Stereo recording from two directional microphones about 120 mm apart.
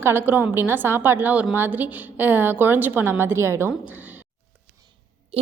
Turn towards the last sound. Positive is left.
turn(degrees=-15)  # may be behind; listen again after turning